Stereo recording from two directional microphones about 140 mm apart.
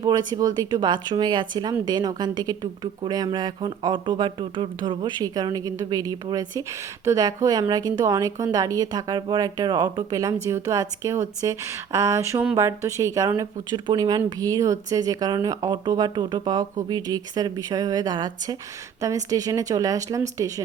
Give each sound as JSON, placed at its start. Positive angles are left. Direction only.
{"t": 0.0, "sound": "speech", "side_deg": -30}